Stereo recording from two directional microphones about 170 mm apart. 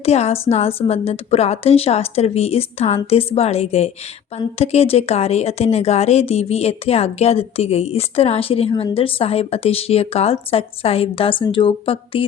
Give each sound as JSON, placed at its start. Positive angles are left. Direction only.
{"t": 0.0, "sound": "a woman's voice", "side_deg": 40}